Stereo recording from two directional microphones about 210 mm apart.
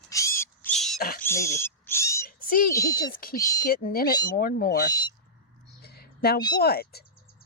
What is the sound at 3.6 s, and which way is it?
Speech, 45° left (ahead or behind).